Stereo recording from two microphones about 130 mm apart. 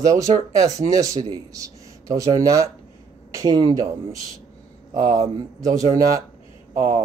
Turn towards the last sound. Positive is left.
turn(degrees=-20)  # may be behind; listen again after turning